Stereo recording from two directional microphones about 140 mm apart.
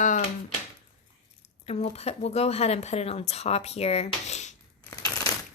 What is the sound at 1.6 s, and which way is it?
Speech, 45° left (ahead or behind).